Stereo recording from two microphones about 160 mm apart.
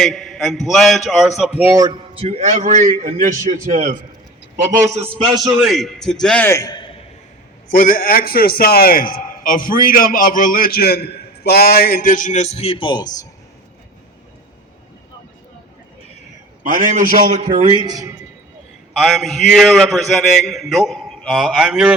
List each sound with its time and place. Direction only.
0.0 s a man's voice: centre (ahead or behind)
1.7 s a man's voice: 25° right (ahead or behind)
5.6 s a man's voice: centre (ahead or behind); by 7.0 s 30° left (ahead or behind)
7.7 s a man's voice: 60° left (ahead or behind); by 13.2 s 25° left (ahead or behind)
16.7 s a man's voice: 55° right (ahead or behind)
17.4 s a man's voice: 35° right (ahead or behind)
17.7 s speech: 25° right (ahead or behind)
18.9 s a man's voice: centre (ahead or behind)